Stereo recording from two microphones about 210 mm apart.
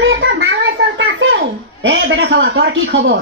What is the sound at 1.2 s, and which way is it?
A child's voice, 65° right (ahead or behind).